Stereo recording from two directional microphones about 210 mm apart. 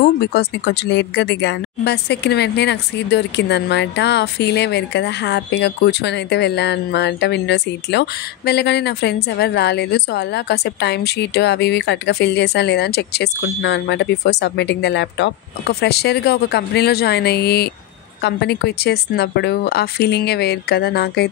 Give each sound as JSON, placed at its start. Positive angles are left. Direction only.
{"t": 0.0, "sound": "speech", "side_deg": 50}